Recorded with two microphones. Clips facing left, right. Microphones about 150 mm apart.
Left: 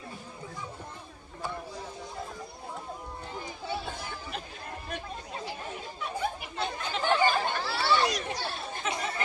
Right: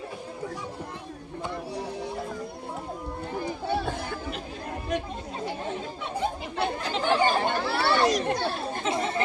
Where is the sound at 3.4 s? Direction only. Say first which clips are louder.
Right 8 dB; 55° right (ahead or behind).